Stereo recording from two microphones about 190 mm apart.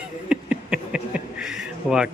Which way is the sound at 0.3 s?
5° right (ahead or behind).